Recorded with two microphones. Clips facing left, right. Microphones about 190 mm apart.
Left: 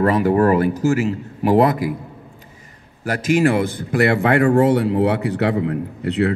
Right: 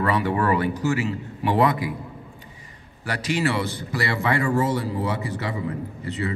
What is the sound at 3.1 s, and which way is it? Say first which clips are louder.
A man's voice: left 8 dB; 50° left (ahead or behind).